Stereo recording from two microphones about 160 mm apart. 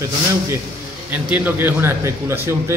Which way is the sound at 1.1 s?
10° right (ahead or behind).